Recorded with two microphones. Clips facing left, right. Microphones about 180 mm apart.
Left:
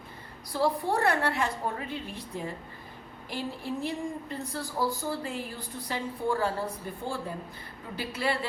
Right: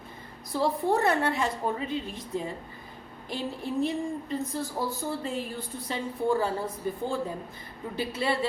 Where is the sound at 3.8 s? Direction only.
20° right (ahead or behind).